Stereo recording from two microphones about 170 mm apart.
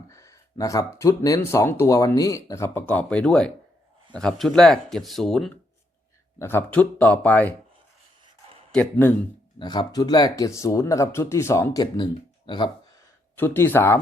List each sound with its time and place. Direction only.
0.1 s speech: 15° left (ahead or behind); by 5.5 s centre (ahead or behind)
6.4 s speech: 10° left (ahead or behind)
8.7 s speech: 10° left (ahead or behind)
9.6 s speech: 25° left (ahead or behind)
13.3 s speech: 10° left (ahead or behind)